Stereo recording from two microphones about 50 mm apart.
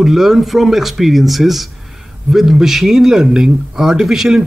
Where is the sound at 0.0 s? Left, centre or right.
Centre.